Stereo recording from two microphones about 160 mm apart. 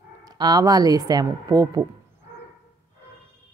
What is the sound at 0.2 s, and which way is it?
Speech, 25° right (ahead or behind).